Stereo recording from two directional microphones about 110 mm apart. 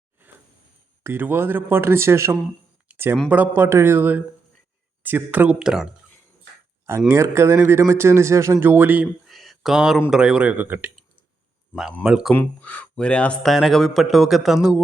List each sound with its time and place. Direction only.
1.0 s speech: 20° right (ahead or behind)
2.9 s a sound: 20° right (ahead or behind)
3.2 s speech: 15° right (ahead or behind)
7.1 s speech: 25° right (ahead or behind)
9.2 s a sound: centre (ahead or behind)
10.1 s speech: 10° right (ahead or behind)
11.7 s speech: 5° right (ahead or behind)
12.3 s speech: 15° left (ahead or behind); by 14.8 s centre (ahead or behind)